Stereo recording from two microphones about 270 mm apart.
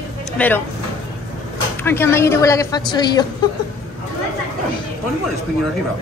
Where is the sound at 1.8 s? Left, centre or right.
Centre.